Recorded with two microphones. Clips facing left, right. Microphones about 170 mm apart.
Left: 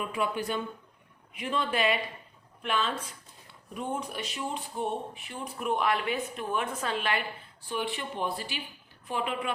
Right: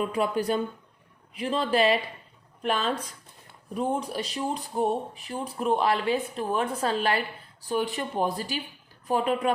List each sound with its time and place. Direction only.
0.0 s speech: 35° right (ahead or behind)